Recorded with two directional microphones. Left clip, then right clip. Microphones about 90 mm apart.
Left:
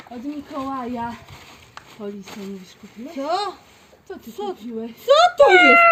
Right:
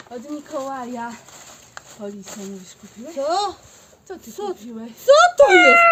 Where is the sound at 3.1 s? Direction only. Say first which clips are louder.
Right 2 dB; 65° right (ahead or behind).